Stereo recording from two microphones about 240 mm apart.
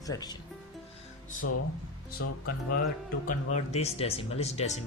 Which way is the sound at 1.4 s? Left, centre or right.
Left.